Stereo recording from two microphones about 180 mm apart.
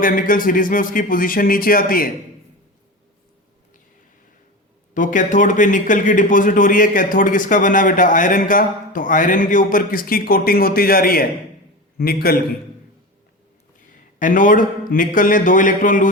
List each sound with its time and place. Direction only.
0.0 s a man's voice: 50° left (ahead or behind)
4.9 s a man's voice: 45° left (ahead or behind)
13.9 s a man's voice: 45° left (ahead or behind)